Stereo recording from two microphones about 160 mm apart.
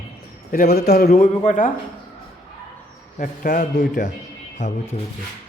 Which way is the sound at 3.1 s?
55° left (ahead or behind).